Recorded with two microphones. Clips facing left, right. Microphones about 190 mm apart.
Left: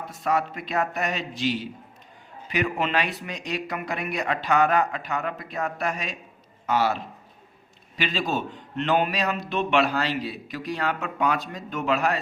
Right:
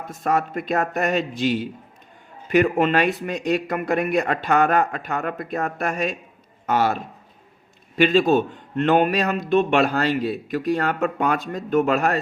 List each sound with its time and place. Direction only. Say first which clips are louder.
0.1 s a man's voice: right 3 dB; 50° right (ahead or behind)